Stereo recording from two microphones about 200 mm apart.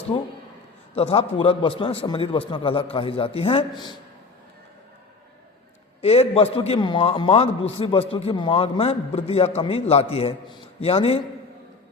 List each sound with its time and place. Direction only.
0.9 s a man's voice: 30° left (ahead or behind)
6.0 s a man's voice: 30° left (ahead or behind)